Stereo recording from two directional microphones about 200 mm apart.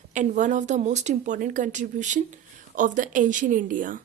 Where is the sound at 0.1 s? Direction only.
40° right (ahead or behind).